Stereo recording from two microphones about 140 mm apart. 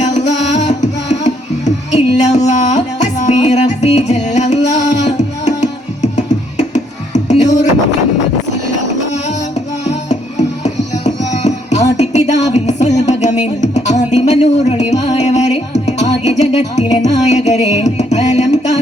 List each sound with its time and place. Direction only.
0.0 s music: 60° left (ahead or behind)
10.1 s music: 55° left (ahead or behind)